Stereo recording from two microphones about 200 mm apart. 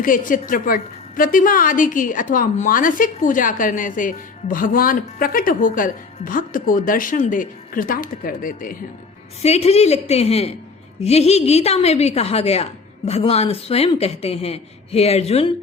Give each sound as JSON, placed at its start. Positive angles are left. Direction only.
{"t": 0.0, "sound": "a woman's voice", "side_deg": 45}
{"t": 9.4, "sound": "speech", "side_deg": 30}